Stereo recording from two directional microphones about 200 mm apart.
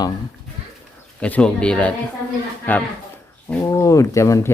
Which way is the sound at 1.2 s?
5° left (ahead or behind).